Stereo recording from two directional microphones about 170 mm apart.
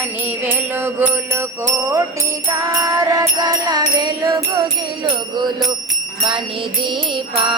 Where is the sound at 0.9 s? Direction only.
15° right (ahead or behind).